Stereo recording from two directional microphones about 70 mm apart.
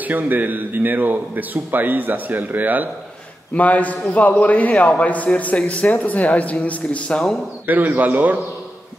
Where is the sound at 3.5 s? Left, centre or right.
Left.